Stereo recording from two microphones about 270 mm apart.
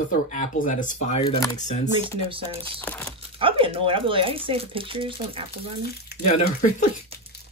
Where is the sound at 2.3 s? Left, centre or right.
Centre.